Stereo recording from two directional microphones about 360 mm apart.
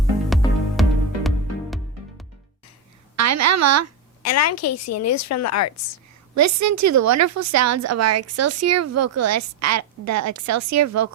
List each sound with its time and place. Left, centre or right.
0.4 s music: centre
0.8 s music: centre
3.2 s a woman's voice: right
4.2 s a woman's voice: left
6.3 s a woman's voice: right